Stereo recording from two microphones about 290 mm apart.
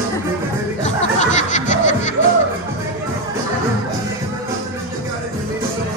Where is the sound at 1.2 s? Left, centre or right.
Left.